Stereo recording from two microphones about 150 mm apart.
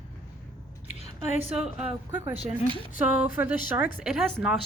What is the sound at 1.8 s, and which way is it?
Speech, 10° right (ahead or behind).